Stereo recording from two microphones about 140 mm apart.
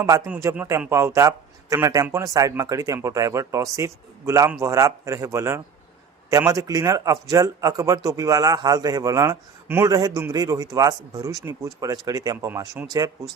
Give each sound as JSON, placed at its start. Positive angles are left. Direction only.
{"t": 0.3, "sound": "speech", "side_deg": -20}
{"t": 12.8, "sound": "speech", "side_deg": -10}